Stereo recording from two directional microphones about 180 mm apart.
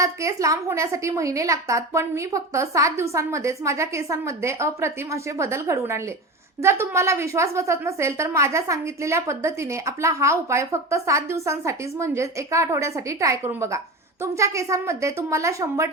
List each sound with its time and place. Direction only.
0.0 s a woman's voice: 15° right (ahead or behind)